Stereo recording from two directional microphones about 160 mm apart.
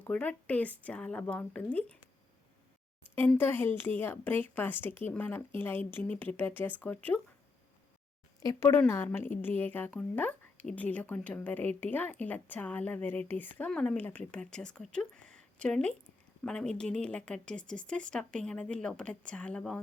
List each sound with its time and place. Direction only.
0.0 s a woman's voice: 10° left (ahead or behind)
3.2 s a woman's voice: 10° left (ahead or behind)
8.4 s a woman's voice: 20° left (ahead or behind)